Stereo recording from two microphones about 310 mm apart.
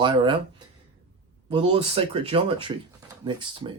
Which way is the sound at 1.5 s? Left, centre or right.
Centre.